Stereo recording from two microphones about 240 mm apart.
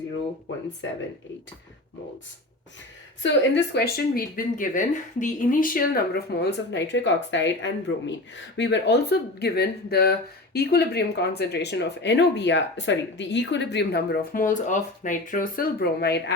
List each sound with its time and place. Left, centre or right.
3.2 s speech: left